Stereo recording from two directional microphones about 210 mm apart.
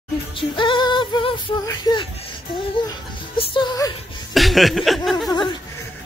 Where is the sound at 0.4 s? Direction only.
25° left (ahead or behind).